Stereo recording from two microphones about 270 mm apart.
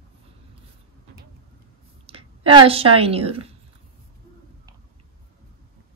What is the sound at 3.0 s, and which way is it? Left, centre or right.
Speech, right.